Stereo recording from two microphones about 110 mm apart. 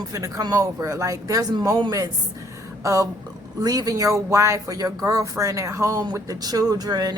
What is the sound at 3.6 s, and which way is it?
A woman's voice, 35° right (ahead or behind).